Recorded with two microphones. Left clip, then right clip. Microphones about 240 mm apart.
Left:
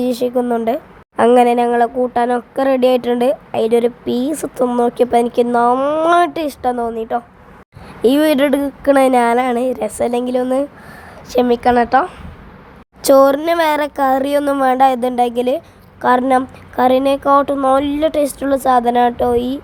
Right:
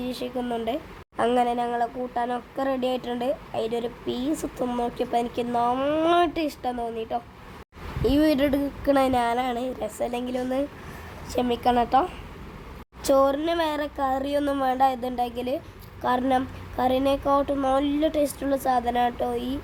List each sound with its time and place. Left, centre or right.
0.0 s speech: left
0.4 s a woman's voice: centre
8.0 s a woman's voice: left
13.0 s speech: left